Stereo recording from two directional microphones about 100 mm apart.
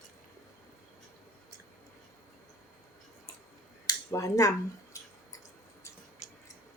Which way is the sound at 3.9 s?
35° left (ahead or behind).